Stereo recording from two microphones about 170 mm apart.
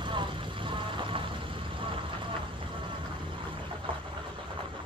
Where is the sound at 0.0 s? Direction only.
30° right (ahead or behind).